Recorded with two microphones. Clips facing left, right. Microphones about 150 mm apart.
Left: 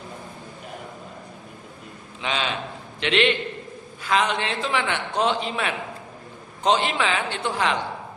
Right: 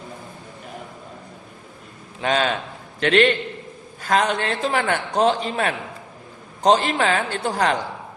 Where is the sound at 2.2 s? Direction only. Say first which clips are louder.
Right 6 dB; 45° right (ahead or behind).